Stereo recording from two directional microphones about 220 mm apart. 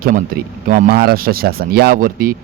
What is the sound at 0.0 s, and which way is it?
Speech, 40° right (ahead or behind).